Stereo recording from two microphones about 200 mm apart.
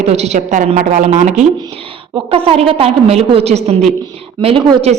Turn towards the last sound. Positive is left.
turn(degrees=-30)  # may be behind; listen again after turning